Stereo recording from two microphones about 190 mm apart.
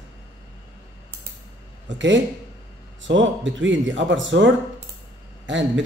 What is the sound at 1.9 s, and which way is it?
A man's voice, 75° right (ahead or behind).